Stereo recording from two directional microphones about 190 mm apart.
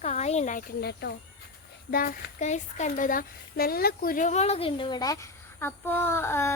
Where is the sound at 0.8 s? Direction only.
55° left (ahead or behind).